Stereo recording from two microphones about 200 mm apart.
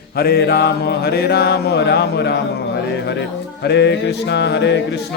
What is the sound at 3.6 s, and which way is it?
Music, 60° left (ahead or behind).